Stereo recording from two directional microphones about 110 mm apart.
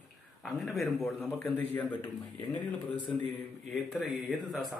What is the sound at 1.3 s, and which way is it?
Speech, 15° left (ahead or behind).